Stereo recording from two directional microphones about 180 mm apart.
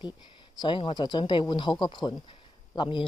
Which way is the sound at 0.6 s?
25° left (ahead or behind).